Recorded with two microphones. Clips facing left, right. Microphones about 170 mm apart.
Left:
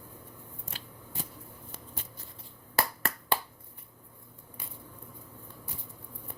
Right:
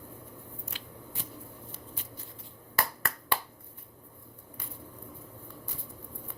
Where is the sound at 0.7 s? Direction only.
40° left (ahead or behind).